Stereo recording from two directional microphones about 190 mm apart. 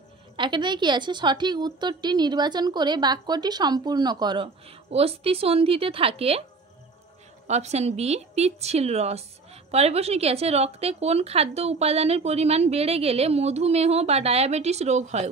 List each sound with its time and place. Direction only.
0.4 s a woman's voice: 25° right (ahead or behind)
7.4 s a woman's voice: 35° right (ahead or behind)